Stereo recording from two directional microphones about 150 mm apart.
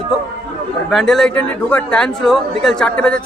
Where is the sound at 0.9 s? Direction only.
Centre (ahead or behind).